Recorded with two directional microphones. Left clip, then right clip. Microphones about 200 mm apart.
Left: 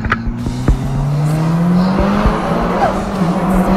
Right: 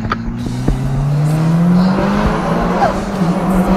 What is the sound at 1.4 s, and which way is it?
Music, 15° right (ahead or behind).